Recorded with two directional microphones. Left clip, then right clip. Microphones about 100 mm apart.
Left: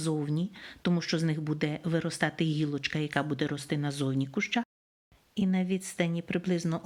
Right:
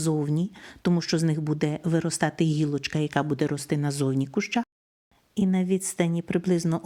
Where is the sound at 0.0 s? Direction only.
45° right (ahead or behind).